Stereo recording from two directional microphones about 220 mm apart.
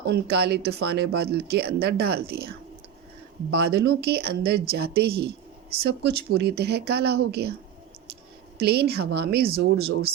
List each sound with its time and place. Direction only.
0.1 s speech: 45° right (ahead or behind)
8.5 s speech: 45° right (ahead or behind)